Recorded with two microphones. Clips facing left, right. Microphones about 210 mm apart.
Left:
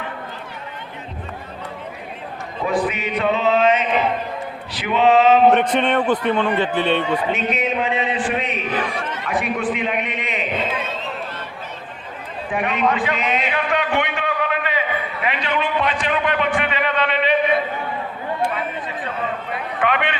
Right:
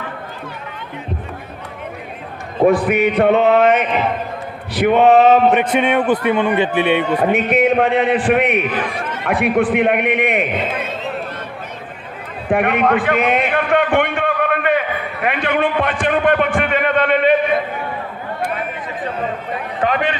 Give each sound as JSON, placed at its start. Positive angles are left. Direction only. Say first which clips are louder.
{"t": 2.6, "sound": "a man's voice", "louder": "right 8 dB", "side_deg": -55}
{"t": 5.5, "sound": "a man's voice", "louder": "right 1 dB", "side_deg": -5}
{"t": 7.2, "sound": "a man's voice", "louder": "right 7 dB", "side_deg": -55}
{"t": 12.5, "sound": "a sound", "louder": "right 6 dB", "side_deg": -60}
{"t": 19.8, "sound": "a man's voice", "louder": "right 3 dB", "side_deg": -40}